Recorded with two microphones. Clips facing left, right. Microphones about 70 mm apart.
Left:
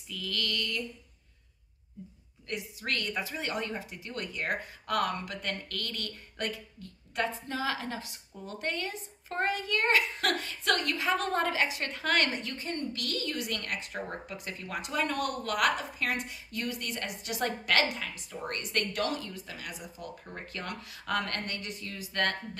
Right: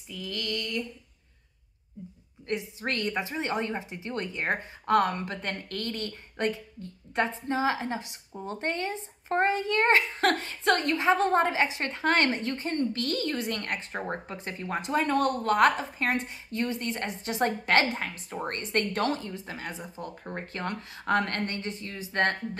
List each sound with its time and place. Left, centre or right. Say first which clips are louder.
0.1 s speech: right 1 dB; right
2.4 s speech: right 5 dB; right
17.9 s speech: right 5 dB; right